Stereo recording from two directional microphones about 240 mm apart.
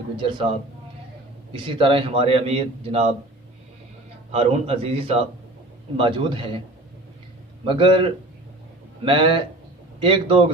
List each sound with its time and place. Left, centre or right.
0.2 s a man's voice: centre
1.5 s a man's voice: right
4.3 s a man's voice: right
7.6 s a man's voice: right